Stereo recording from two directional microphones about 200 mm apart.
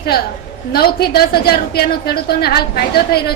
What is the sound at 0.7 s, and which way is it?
A woman's voice, 50° left (ahead or behind).